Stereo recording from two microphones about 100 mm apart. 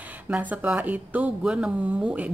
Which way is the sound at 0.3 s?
15° right (ahead or behind).